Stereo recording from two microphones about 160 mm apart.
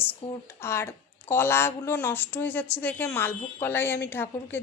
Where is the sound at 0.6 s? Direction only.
15° left (ahead or behind).